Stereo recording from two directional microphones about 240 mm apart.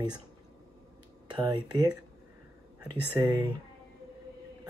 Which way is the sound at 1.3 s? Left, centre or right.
Centre.